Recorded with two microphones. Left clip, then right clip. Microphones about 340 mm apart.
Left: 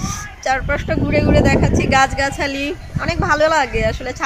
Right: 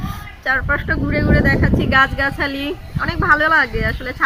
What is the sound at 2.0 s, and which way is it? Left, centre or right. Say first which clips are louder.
Speech: right 2 dB; centre.